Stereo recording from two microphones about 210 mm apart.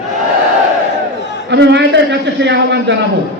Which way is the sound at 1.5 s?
55° right (ahead or behind).